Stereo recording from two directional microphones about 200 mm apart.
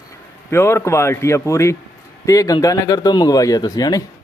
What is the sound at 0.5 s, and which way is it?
A man's voice, 15° left (ahead or behind).